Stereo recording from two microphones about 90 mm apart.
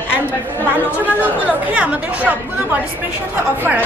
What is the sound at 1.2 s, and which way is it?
A woman's voice, 15° right (ahead or behind).